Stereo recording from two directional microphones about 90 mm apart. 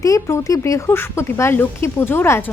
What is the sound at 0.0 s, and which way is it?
Speech, 35° left (ahead or behind).